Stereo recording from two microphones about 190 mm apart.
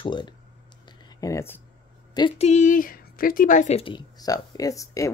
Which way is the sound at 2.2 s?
30° left (ahead or behind).